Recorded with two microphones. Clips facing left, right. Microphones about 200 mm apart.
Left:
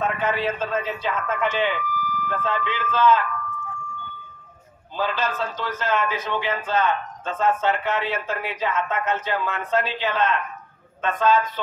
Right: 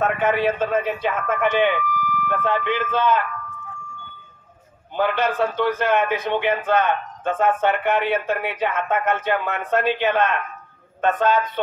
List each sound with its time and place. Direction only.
0.0 s a man's voice: 60° right (ahead or behind)
4.9 s a man's voice: 65° right (ahead or behind)